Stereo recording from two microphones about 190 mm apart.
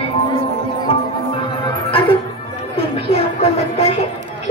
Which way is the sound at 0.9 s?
30° left (ahead or behind).